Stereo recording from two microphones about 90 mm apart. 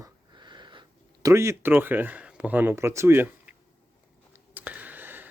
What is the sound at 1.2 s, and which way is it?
Speech, 30° right (ahead or behind).